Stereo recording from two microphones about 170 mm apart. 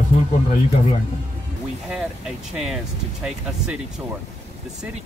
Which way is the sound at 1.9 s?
5° right (ahead or behind).